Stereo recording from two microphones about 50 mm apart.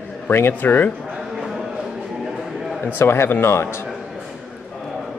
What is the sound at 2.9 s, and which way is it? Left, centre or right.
Speech, left.